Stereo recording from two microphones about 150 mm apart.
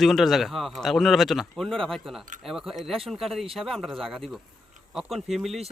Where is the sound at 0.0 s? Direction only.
Centre (ahead or behind).